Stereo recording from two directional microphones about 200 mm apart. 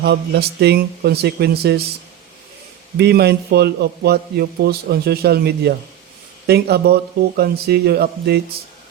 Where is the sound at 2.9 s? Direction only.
55° right (ahead or behind).